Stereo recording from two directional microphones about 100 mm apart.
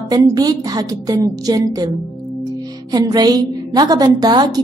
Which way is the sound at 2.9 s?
40° right (ahead or behind).